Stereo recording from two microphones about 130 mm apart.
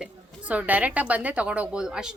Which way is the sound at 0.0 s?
10° right (ahead or behind).